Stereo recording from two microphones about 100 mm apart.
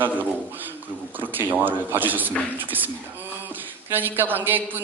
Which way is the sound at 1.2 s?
20° right (ahead or behind).